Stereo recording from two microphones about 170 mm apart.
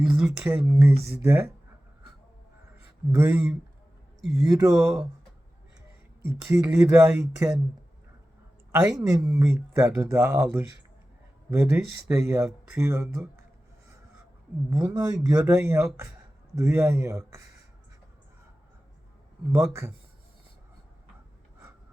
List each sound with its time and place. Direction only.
0.1 s speech: 10° right (ahead or behind)
2.7 s a sound: 10° right (ahead or behind)
4.3 s speech: 20° right (ahead or behind)
6.5 s speech: 15° right (ahead or behind)
8.7 s speech: 20° right (ahead or behind)
14.7 s speech: 20° right (ahead or behind)